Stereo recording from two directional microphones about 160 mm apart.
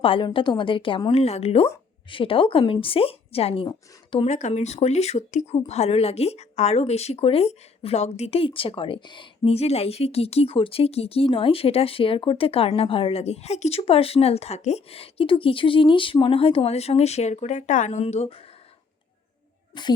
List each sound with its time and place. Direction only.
0.0 s speech: 30° left (ahead or behind)
4.3 s speech: 45° left (ahead or behind)
19.7 s speech: 30° left (ahead or behind)